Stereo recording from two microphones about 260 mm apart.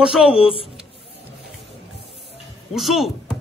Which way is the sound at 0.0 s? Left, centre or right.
Centre.